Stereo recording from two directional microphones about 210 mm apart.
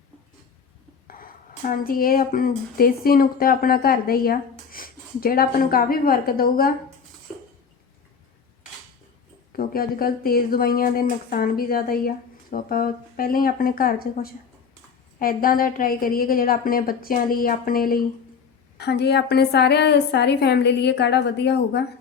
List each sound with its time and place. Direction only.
1.0 s speech: 40° left (ahead or behind)
9.5 s speech: 45° left (ahead or behind)